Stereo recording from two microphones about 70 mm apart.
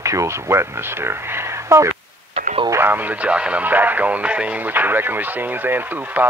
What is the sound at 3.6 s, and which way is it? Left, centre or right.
Speech, right.